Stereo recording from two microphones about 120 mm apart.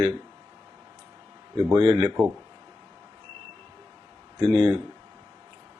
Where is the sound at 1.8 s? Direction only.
45° right (ahead or behind).